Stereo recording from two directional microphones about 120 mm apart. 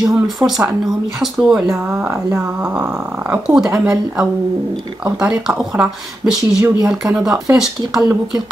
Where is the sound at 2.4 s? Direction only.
10° right (ahead or behind).